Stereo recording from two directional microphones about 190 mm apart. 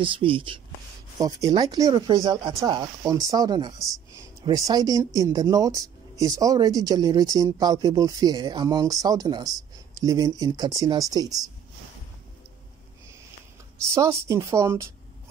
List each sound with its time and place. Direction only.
0.0 s speech: 25° right (ahead or behind)
13.9 s speech: 15° right (ahead or behind)